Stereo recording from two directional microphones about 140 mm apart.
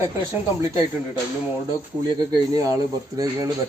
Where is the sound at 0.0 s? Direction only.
20° right (ahead or behind).